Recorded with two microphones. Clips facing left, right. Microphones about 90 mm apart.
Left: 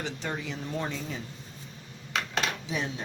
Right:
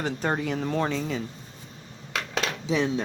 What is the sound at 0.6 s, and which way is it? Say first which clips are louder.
Speech: right 7 dB; 90° right.